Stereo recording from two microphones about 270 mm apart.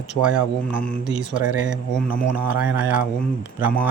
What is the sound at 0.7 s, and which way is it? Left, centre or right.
Mantra, centre.